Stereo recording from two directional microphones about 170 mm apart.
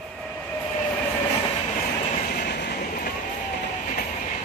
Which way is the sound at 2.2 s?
70° left (ahead or behind).